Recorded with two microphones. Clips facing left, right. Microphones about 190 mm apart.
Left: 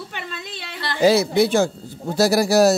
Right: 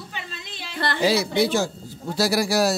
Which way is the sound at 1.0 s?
50° left (ahead or behind).